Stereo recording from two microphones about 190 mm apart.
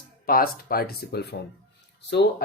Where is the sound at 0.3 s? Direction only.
50° left (ahead or behind).